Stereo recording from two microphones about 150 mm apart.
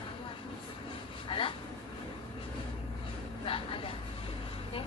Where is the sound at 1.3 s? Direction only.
35° left (ahead or behind).